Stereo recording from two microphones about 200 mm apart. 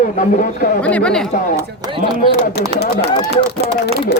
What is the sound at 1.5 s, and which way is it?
Speech, 20° right (ahead or behind).